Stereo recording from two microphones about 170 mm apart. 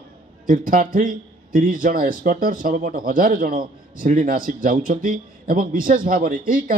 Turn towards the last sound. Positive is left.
turn(degrees=-55)  # may be behind; listen again after turning